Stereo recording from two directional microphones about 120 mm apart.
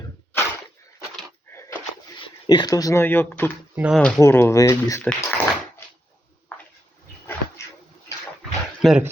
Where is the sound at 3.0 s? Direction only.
20° left (ahead or behind).